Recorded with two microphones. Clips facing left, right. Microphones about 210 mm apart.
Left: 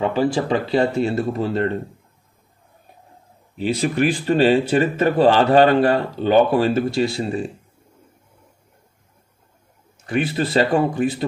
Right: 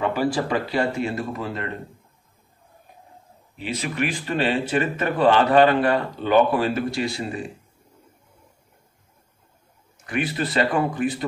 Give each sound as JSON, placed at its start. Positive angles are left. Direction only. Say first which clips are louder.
{"t": 0.0, "sound": "speech", "louder": "left 3 dB", "side_deg": 25}
{"t": 3.6, "sound": "speech", "louder": "left 7 dB", "side_deg": 35}
{"t": 10.0, "sound": "speech", "louder": "left 4 dB", "side_deg": 30}